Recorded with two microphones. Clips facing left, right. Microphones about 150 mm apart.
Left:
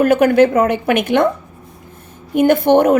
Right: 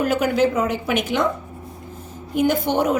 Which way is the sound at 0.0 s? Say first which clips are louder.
Left 8 dB; 55° left (ahead or behind).